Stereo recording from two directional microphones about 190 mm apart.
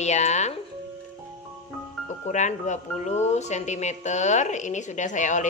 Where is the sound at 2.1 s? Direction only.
40° left (ahead or behind).